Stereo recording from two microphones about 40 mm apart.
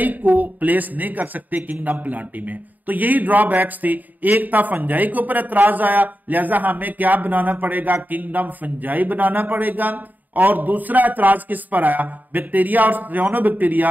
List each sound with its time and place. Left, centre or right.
0.0 s a woman's voice: right